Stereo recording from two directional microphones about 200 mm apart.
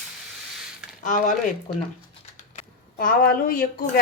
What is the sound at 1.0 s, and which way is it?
Speech, 40° left (ahead or behind).